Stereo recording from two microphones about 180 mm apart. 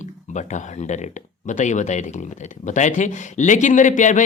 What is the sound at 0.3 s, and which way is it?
Speech, 40° left (ahead or behind).